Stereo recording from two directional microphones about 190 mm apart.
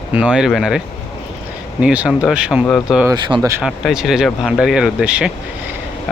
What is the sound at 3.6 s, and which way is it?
Speech, 5° right (ahead or behind).